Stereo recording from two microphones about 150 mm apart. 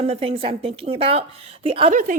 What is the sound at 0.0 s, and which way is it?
Speech, 40° right (ahead or behind).